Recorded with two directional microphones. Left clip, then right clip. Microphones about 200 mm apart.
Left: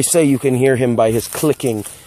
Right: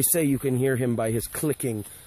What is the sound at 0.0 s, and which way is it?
Speech, 5° right (ahead or behind).